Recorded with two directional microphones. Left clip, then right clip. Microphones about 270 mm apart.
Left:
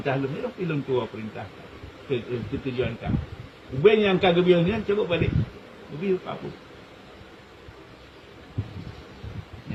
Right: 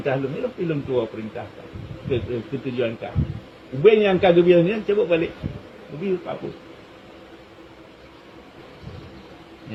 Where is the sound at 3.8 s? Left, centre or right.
Left.